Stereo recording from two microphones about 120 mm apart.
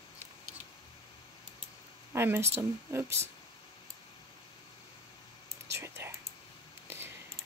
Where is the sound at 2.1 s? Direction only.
20° right (ahead or behind).